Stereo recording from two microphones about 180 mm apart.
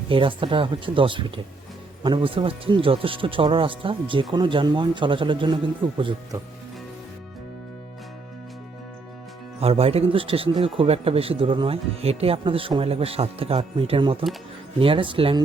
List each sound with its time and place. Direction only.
0.1 s speech: 30° right (ahead or behind)
9.6 s speech: 35° right (ahead or behind)